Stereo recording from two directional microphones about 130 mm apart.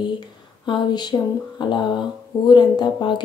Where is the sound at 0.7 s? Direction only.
35° left (ahead or behind).